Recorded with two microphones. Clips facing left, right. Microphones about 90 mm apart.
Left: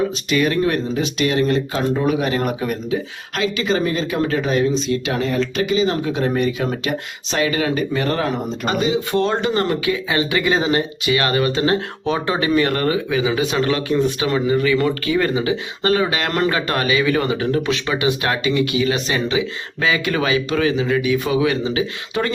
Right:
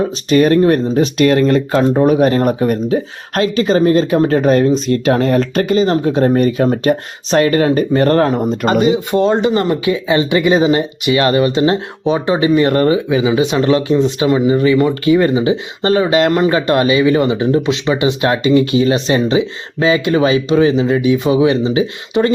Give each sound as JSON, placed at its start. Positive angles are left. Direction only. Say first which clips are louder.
{"t": 0.0, "sound": "speech", "louder": "right 6 dB", "side_deg": -40}
{"t": 9.1, "sound": "speech", "louder": "right 5 dB", "side_deg": -20}